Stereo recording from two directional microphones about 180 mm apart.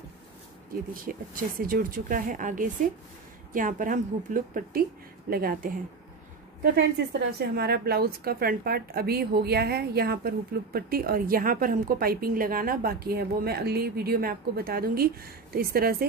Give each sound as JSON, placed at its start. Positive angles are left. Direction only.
{"t": 0.9, "sound": "speech", "side_deg": -50}
{"t": 6.6, "sound": "a woman's voice", "side_deg": -70}